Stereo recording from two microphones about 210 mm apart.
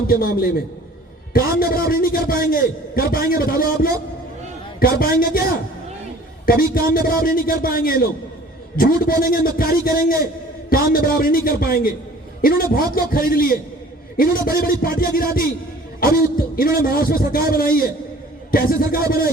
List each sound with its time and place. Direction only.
0.1 s a man's voice: 45° left (ahead or behind)
6.4 s a man's voice: 45° left (ahead or behind)
16.6 s a man's voice: 45° left (ahead or behind)